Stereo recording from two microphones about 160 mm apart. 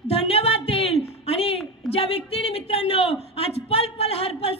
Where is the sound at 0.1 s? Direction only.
40° left (ahead or behind).